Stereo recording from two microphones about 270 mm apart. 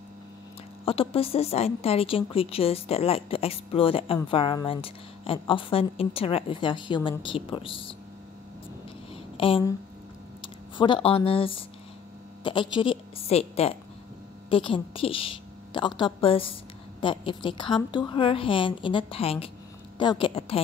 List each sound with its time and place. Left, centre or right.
0.8 s a woman's voice: left
9.1 s a sound: centre
10.4 s a woman's voice: centre